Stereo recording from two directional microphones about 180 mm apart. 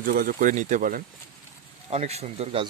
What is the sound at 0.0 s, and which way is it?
Speech, 50° right (ahead or behind).